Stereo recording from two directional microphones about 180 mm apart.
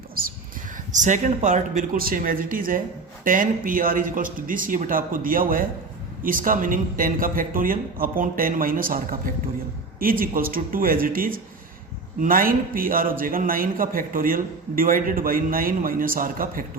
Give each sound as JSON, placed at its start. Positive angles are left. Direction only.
{"t": 0.2, "sound": "whispering", "side_deg": -55}
{"t": 0.9, "sound": "a man's voice", "side_deg": -45}